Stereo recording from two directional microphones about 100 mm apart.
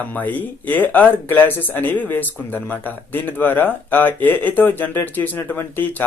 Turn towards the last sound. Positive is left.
turn(degrees=20)  # may be behind; listen again after turning